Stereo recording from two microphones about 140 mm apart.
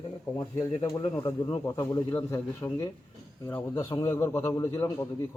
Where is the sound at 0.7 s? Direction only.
40° left (ahead or behind).